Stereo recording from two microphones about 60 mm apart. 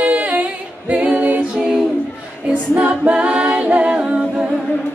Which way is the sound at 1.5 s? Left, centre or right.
Centre.